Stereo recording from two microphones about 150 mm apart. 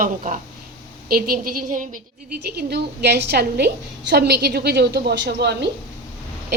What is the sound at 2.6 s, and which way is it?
A woman's voice, 90° right.